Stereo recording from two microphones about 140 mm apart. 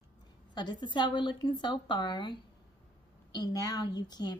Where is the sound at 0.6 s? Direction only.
35° left (ahead or behind).